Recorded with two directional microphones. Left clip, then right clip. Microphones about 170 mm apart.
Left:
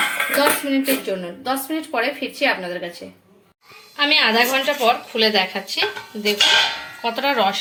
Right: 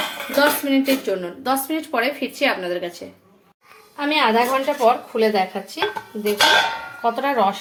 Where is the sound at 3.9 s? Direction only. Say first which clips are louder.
Left 2 dB; 15° right (ahead or behind).